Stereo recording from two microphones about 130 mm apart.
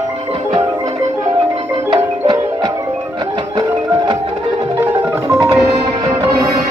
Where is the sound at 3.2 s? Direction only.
35° right (ahead or behind).